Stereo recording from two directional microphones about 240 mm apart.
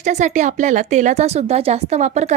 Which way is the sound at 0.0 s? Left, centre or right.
Right.